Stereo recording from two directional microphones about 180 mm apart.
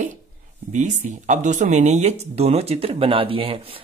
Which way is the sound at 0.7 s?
45° right (ahead or behind).